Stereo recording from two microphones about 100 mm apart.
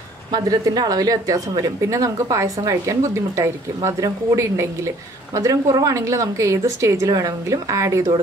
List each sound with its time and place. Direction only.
0.3 s a woman's voice: 40° right (ahead or behind)